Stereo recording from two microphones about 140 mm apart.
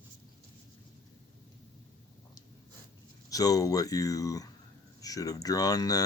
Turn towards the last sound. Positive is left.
turn(degrees=25)  # may be behind; listen again after turning